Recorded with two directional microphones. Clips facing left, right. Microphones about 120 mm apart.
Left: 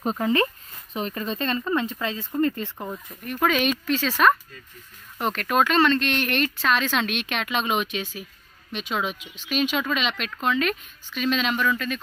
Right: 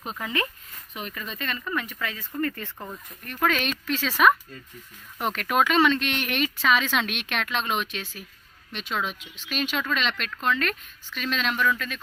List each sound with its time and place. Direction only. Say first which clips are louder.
0.0 s speech: left 8 dB; 35° left (ahead or behind); by 3.3 s 15° left (ahead or behind)
3.3 s speech: left 3 dB; 5° left (ahead or behind)